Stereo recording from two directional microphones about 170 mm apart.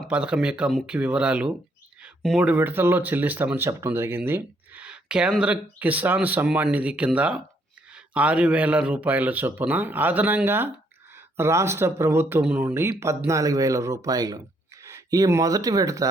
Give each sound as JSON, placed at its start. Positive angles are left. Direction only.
{"t": 0.0, "sound": "speech", "side_deg": -5}